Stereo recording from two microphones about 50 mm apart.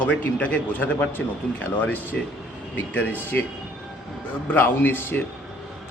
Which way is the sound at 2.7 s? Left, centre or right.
Left.